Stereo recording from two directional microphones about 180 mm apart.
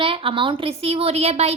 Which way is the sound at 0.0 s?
30° right (ahead or behind).